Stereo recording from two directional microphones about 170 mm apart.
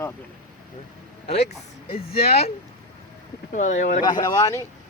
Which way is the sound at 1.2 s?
35° left (ahead or behind).